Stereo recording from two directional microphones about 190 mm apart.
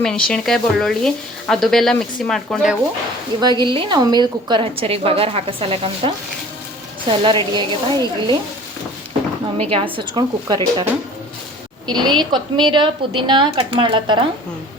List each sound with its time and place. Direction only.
0.0 s a woman's voice: 5° left (ahead or behind)
3.4 s a woman's voice: 25° right (ahead or behind)
9.6 s a woman's voice: 30° right (ahead or behind)
11.9 s a woman's voice: 25° right (ahead or behind)